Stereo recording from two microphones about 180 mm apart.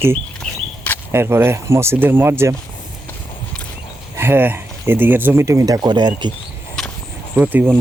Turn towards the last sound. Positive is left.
turn(degrees=-10)  # may be behind; listen again after turning